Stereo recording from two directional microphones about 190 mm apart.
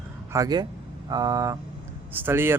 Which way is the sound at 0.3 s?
20° right (ahead or behind).